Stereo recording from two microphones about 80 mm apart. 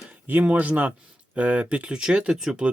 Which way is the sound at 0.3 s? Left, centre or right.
Right.